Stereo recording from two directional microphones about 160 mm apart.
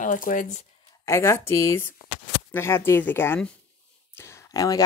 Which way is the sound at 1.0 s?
15° left (ahead or behind).